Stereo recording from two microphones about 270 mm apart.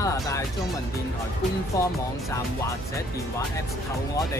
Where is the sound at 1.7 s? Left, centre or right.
Centre.